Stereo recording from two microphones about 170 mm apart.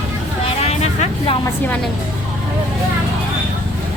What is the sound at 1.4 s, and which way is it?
Music, 10° left (ahead or behind).